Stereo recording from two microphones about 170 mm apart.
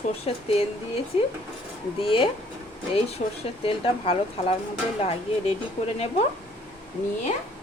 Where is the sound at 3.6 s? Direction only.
35° left (ahead or behind).